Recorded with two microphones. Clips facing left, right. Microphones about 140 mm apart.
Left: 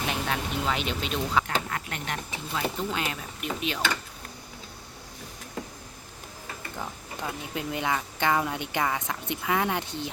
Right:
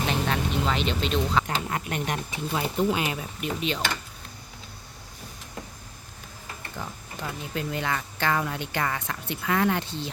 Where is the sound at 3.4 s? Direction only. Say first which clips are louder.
Right 2 dB; centre (ahead or behind).